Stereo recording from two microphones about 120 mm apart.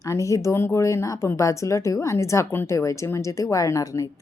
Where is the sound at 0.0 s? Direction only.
25° left (ahead or behind).